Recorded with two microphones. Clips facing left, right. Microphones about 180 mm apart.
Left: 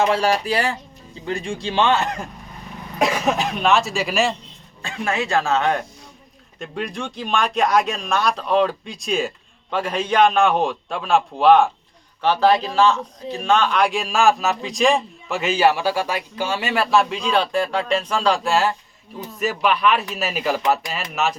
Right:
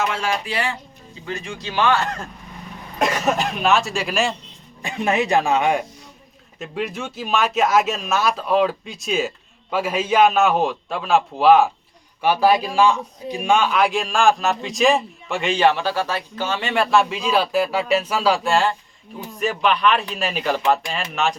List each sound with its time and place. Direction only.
0.0 s speech: 35° left (ahead or behind); by 2.2 s 20° left (ahead or behind)
3.0 s a man's voice: centre (ahead or behind)
4.8 s a man's voice: 20° right (ahead or behind); by 21.3 s 5° left (ahead or behind)